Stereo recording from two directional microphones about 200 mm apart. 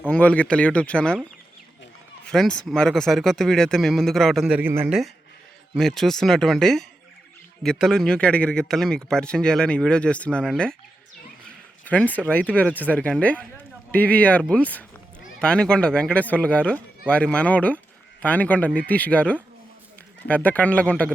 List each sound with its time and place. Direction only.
0.1 s speech: 5° left (ahead or behind)
2.2 s a man's voice: 5° left (ahead or behind)
11.9 s a man's voice: 5° left (ahead or behind)